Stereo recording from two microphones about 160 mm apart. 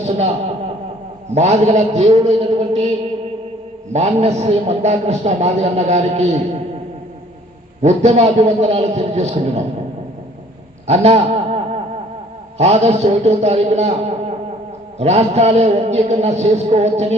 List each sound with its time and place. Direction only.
0.0 s a man's voice: 40° right (ahead or behind)
1.4 s a man's voice: 45° right (ahead or behind)
3.9 s a man's voice: 45° right (ahead or behind)
7.8 s a man's voice: 45° right (ahead or behind)
10.8 s a sound: 40° right (ahead or behind)
12.5 s a man's voice: 40° right (ahead or behind)